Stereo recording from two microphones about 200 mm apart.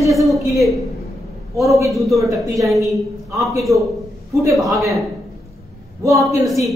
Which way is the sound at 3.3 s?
15° right (ahead or behind).